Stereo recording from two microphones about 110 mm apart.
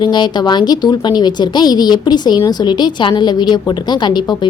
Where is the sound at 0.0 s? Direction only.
45° left (ahead or behind).